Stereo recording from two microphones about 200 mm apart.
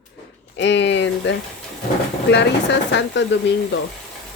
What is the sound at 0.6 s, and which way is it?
Speech, 60° left (ahead or behind).